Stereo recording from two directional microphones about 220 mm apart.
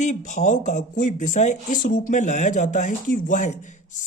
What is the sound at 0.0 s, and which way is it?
Speech, 35° left (ahead or behind).